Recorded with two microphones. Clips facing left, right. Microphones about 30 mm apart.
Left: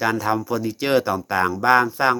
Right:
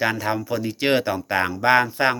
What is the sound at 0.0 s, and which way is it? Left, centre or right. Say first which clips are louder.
Speech: left 2 dB; right.